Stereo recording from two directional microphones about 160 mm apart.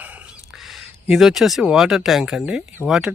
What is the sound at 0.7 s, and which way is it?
Speech, centre (ahead or behind).